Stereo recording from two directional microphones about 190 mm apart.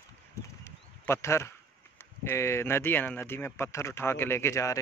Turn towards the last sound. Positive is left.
turn(degrees=15)  # may be behind; listen again after turning